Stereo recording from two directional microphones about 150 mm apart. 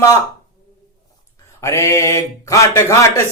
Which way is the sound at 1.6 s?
20° left (ahead or behind).